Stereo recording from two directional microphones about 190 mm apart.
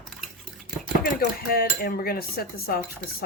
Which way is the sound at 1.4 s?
50° left (ahead or behind).